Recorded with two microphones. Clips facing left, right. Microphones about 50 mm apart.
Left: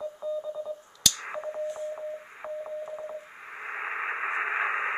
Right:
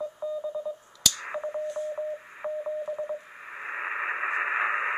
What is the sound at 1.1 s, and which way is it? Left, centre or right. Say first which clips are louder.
Radio: right 2 dB; centre.